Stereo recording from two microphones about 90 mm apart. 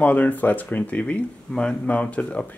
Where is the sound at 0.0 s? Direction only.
20° left (ahead or behind).